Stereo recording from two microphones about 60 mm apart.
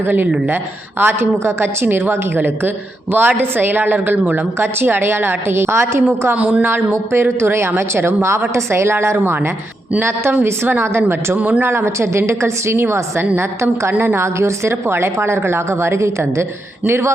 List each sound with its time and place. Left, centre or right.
0.0 s a woman's voice: right
4.6 s a woman's voice: right
6.3 s speech: right
7.1 s a woman's voice: right
11.3 s a woman's voice: right